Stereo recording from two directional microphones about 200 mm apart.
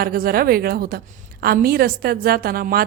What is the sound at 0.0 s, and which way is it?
A woman's voice, 50° right (ahead or behind).